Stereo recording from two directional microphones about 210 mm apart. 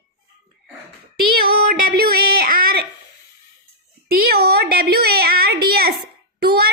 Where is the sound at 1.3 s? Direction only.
45° right (ahead or behind).